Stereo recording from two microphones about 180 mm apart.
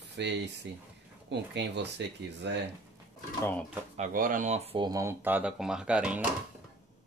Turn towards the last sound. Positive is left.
turn(degrees=-5)  # may be behind; listen again after turning